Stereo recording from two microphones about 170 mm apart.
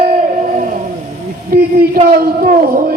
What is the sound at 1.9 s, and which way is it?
A man's voice, 50° right (ahead or behind).